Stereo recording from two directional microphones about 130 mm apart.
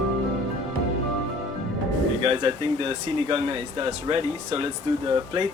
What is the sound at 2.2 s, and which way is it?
Speech, 45° right (ahead or behind).